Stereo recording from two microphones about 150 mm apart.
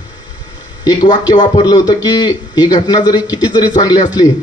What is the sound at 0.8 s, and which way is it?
A man's voice, 25° left (ahead or behind).